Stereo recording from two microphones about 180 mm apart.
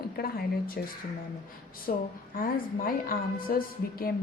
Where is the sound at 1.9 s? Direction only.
55° left (ahead or behind).